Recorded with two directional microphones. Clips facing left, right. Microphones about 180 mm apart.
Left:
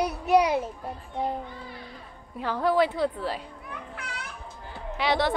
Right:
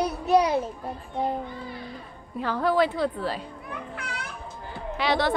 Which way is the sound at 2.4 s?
15° left (ahead or behind).